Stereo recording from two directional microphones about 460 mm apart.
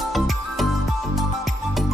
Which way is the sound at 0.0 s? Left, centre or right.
Centre.